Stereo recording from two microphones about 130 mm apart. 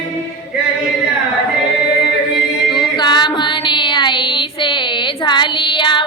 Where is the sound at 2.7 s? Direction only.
35° left (ahead or behind).